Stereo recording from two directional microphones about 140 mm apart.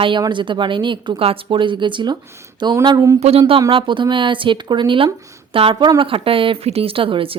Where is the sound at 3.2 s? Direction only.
45° right (ahead or behind).